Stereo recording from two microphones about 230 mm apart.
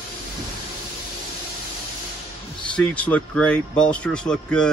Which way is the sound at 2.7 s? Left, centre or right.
Centre.